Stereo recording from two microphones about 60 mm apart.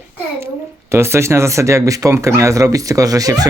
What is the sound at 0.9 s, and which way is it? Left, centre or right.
Speech, right.